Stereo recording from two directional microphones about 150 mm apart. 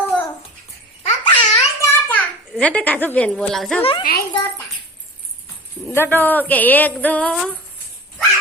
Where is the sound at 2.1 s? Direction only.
10° left (ahead or behind).